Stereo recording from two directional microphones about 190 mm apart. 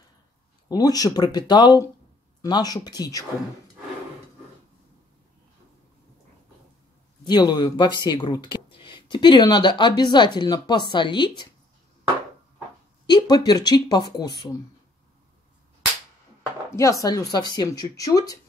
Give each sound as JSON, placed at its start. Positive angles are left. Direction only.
{"t": 0.7, "sound": "speech", "side_deg": 20}
{"t": 7.2, "sound": "speech", "side_deg": 20}
{"t": 13.0, "sound": "speech", "side_deg": 20}
{"t": 17.0, "sound": "speech", "side_deg": 20}